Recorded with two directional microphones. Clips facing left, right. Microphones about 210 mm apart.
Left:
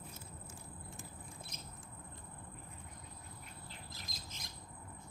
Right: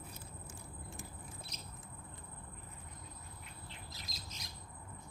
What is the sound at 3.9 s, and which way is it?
Bird, 50° left (ahead or behind).